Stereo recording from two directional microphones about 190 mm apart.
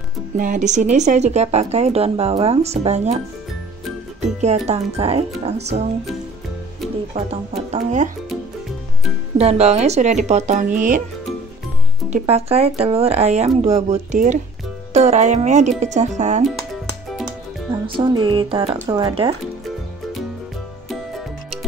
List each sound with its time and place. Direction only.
0.4 s speech: 40° right (ahead or behind)
4.4 s speech: 35° right (ahead or behind)
7.2 s speech: 35° right (ahead or behind)
9.4 s speech: 35° right (ahead or behind)
12.1 s speech: 35° right (ahead or behind)
17.9 s speech: 25° right (ahead or behind)